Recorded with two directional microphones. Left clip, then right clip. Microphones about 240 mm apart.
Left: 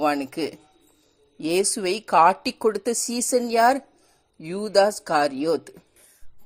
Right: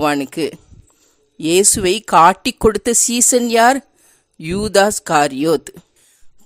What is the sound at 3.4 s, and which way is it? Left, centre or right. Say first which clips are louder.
Speech: right 6 dB; right.